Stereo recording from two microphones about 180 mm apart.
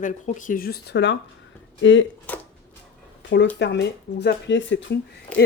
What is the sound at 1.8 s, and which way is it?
Speech, 90° left.